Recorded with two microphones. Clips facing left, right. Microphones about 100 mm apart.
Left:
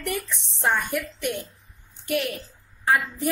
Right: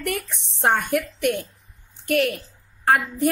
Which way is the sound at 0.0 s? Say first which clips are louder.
Right 2 dB; 60° right (ahead or behind).